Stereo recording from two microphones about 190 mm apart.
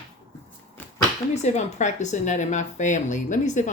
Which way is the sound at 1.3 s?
35° left (ahead or behind).